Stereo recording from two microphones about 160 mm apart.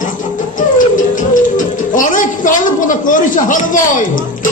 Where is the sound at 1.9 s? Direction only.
55° left (ahead or behind).